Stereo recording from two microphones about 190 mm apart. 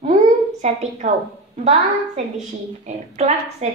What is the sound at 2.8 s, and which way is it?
Speech, 35° right (ahead or behind).